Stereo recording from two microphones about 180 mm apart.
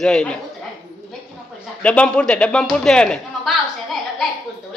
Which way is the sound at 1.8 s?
5° left (ahead or behind).